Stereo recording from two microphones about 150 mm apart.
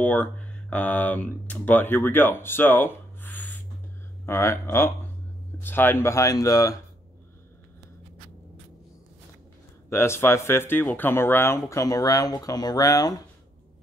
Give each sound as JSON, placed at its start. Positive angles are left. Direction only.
{"t": 0.0, "sound": "speech", "side_deg": 10}
{"t": 9.8, "sound": "speech", "side_deg": 15}